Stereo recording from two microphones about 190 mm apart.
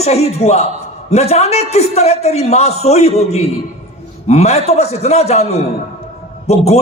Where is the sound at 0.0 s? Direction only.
35° left (ahead or behind).